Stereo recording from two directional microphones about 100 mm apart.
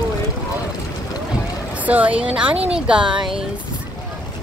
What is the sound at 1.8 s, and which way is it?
A woman's voice, 15° right (ahead or behind).